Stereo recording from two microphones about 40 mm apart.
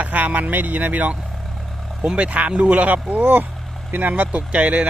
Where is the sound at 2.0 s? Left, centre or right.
Right.